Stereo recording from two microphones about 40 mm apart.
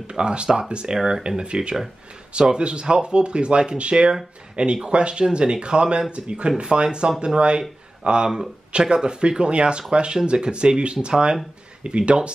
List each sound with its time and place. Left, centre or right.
0.0 s speech: right
0.9 s speech: centre
1.2 s speech: right